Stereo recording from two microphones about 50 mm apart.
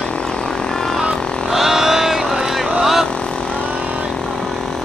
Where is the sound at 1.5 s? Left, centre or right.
Centre.